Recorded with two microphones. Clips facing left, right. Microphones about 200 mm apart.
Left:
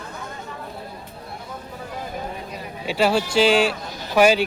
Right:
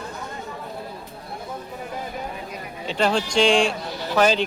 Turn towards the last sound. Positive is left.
turn(degrees=10)  # may be behind; listen again after turning